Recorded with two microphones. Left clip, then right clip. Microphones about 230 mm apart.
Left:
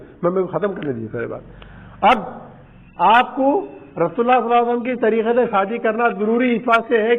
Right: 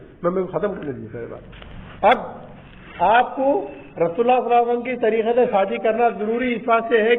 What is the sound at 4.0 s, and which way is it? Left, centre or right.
A man's voice, left.